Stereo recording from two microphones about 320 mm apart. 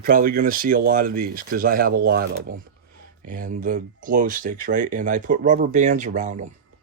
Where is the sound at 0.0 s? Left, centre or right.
Right.